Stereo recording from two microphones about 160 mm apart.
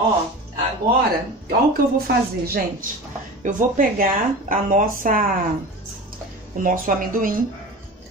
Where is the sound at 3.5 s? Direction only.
55° right (ahead or behind).